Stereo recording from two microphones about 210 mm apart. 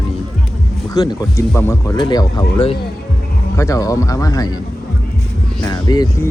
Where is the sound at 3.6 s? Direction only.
15° left (ahead or behind).